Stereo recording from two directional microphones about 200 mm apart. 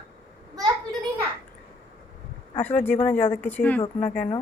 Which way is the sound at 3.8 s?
35° left (ahead or behind).